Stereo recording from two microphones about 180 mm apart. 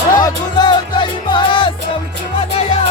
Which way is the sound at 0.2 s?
25° left (ahead or behind).